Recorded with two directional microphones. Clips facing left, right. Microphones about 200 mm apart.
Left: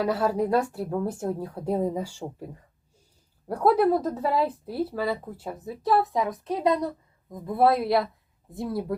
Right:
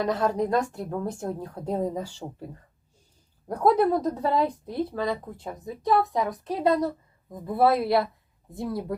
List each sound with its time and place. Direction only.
0.0 s a woman's voice: 10° left (ahead or behind)
3.5 s a woman's voice: 5° left (ahead or behind)